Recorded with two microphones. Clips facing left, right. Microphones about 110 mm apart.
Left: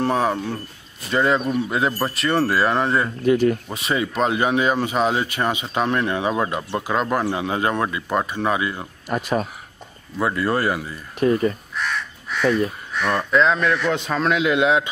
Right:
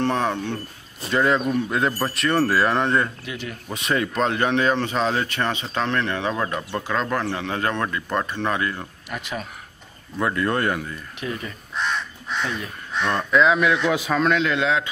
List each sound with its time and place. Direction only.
0.0 s speech: 5° left (ahead or behind)
3.3 s speech: 45° left (ahead or behind)
3.6 s speech: centre (ahead or behind)
9.1 s speech: 40° left (ahead or behind)
10.1 s speech: 5° left (ahead or behind)
11.1 s speech: 40° left (ahead or behind)
11.7 s crow: 25° right (ahead or behind)
12.4 s speech: 40° left (ahead or behind)
13.0 s speech: 5° left (ahead or behind)